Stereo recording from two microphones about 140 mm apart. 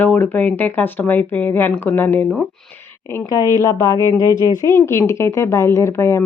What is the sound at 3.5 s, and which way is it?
Speech, 25° left (ahead or behind).